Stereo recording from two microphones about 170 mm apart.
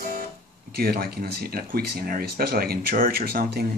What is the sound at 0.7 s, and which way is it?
Speech, 65° right (ahead or behind).